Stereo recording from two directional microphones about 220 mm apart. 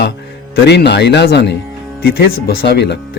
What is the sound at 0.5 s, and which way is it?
Speech, 50° left (ahead or behind).